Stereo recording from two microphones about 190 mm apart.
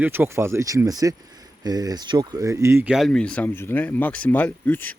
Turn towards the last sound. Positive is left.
turn(degrees=10)  # may be behind; listen again after turning